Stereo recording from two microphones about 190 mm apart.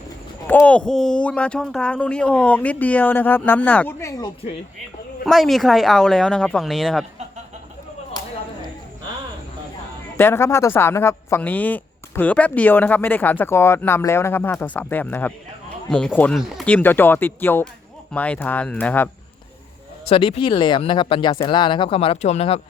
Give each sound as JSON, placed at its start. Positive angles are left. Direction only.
{"t": 0.4, "sound": "speech", "side_deg": 10}
{"t": 5.2, "sound": "speech", "side_deg": 0}
{"t": 10.2, "sound": "speech", "side_deg": 10}
{"t": 20.1, "sound": "speech", "side_deg": 30}